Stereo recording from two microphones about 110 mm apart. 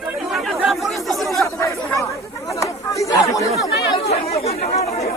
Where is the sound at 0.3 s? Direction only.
Centre (ahead or behind).